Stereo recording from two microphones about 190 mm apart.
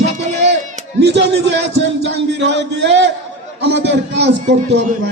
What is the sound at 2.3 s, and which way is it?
A man's voice, 65° right (ahead or behind).